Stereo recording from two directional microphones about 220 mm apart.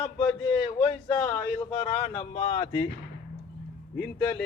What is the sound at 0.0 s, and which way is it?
Speech, 25° left (ahead or behind).